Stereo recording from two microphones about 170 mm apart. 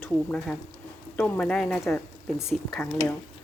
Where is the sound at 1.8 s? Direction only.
15° left (ahead or behind).